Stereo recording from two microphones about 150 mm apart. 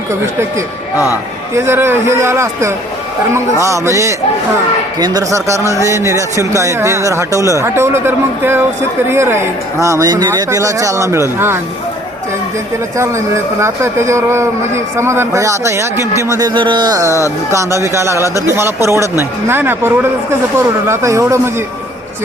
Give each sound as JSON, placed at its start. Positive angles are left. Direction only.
{"t": 1.1, "sound": "a man's voice", "side_deg": -15}
{"t": 13.0, "sound": "a man's voice", "side_deg": -20}
{"t": 17.1, "sound": "speech", "side_deg": 20}
{"t": 17.5, "sound": "a man's voice", "side_deg": -20}